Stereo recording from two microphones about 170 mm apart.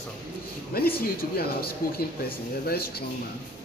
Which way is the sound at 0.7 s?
60° left (ahead or behind).